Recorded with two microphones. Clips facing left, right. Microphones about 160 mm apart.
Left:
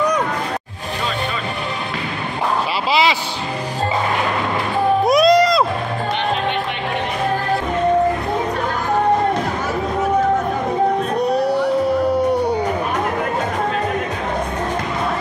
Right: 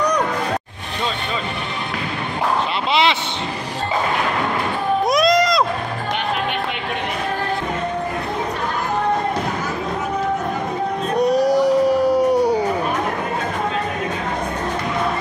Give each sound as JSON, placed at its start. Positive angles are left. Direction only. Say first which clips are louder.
{"t": 2.9, "sound": "music", "louder": "left 1 dB", "side_deg": 5}
{"t": 5.0, "sound": "music", "louder": "left 3 dB", "side_deg": 5}
{"t": 11.2, "sound": "a sound", "louder": "right 3 dB", "side_deg": -35}
{"t": 11.6, "sound": "howl", "louder": "right 2 dB", "side_deg": -10}